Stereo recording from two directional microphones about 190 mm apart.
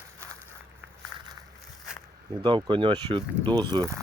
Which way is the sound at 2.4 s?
25° right (ahead or behind).